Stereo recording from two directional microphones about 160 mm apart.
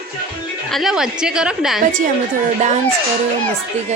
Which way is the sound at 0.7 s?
Centre (ahead or behind).